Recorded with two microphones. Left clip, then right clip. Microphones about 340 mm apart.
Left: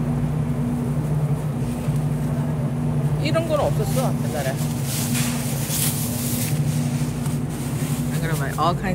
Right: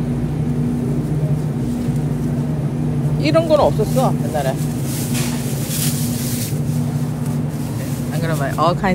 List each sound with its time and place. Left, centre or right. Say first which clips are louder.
3.3 s speech: right 8 dB; right